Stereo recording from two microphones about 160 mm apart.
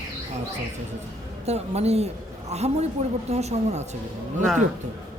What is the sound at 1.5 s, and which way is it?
A man's voice, 40° right (ahead or behind).